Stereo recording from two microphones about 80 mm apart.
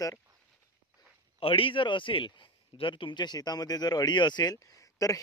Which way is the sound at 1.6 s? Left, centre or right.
Left.